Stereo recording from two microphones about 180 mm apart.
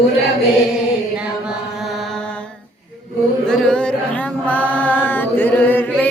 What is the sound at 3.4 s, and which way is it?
Chant, 5° left (ahead or behind).